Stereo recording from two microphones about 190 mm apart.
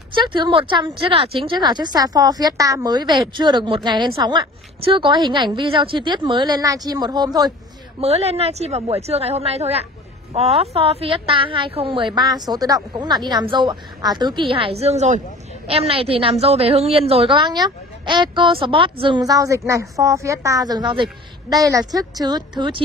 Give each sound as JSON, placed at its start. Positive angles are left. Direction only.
{"t": 0.1, "sound": "speech", "side_deg": -25}
{"t": 8.0, "sound": "a woman's voice", "side_deg": -35}